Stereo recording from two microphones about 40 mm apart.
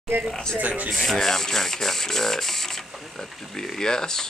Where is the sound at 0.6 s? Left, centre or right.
Right.